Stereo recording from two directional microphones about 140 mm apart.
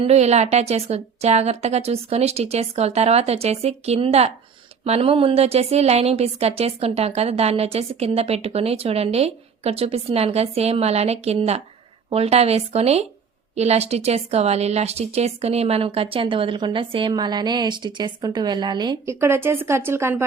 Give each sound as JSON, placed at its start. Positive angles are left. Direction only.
{"t": 0.0, "sound": "a woman's voice", "side_deg": -50}
{"t": 19.0, "sound": "speech", "side_deg": -20}